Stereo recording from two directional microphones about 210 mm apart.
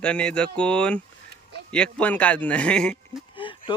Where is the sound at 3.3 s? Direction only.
25° left (ahead or behind).